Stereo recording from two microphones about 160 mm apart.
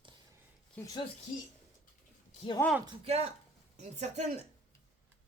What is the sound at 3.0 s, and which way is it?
Speech, 40° right (ahead or behind).